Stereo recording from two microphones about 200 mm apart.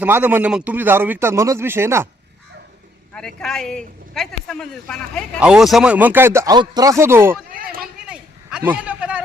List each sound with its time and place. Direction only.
0.0 s a man's voice: 10° right (ahead or behind)
3.2 s a man's voice: 5° left (ahead or behind)
7.5 s run: 45° right (ahead or behind)
8.0 s a sound: 5° right (ahead or behind)